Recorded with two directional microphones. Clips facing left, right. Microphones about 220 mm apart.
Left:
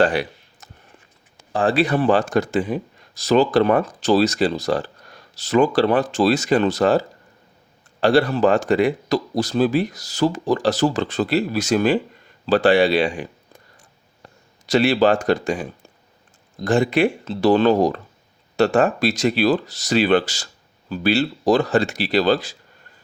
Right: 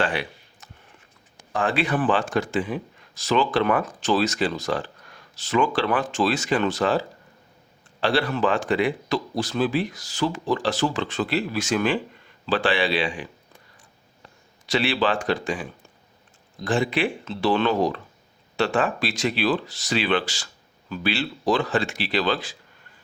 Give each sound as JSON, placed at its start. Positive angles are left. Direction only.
{"t": 0.0, "sound": "a sound", "side_deg": 40}
{"t": 1.5, "sound": "speech", "side_deg": 35}
{"t": 8.0, "sound": "speech", "side_deg": 40}
{"t": 14.7, "sound": "speech", "side_deg": 40}